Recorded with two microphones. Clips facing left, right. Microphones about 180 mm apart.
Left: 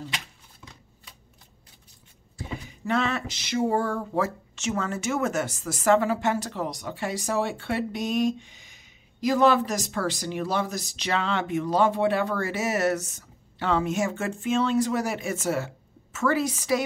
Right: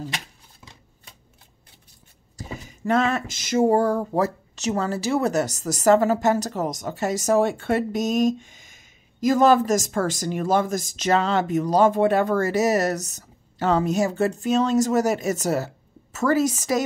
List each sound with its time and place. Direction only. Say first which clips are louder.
2.3 s speech: even; 40° right (ahead or behind)